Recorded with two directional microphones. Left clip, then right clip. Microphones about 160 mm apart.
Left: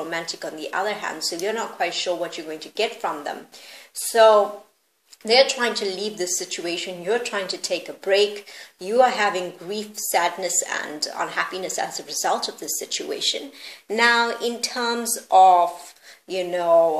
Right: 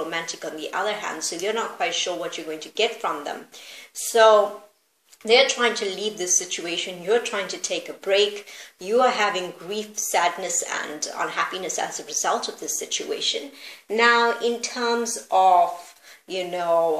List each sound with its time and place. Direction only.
0.1 s a woman's voice: 45° left (ahead or behind)